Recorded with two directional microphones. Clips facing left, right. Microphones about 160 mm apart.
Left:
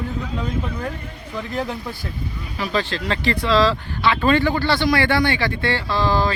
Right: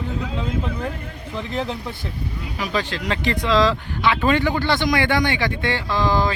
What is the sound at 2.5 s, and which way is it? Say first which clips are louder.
Speech: left 2 dB; 15° right (ahead or behind).